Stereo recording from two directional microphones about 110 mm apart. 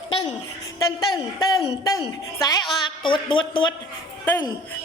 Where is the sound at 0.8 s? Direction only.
35° left (ahead or behind).